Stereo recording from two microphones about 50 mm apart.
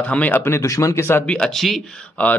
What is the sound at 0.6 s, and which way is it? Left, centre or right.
Speech, left.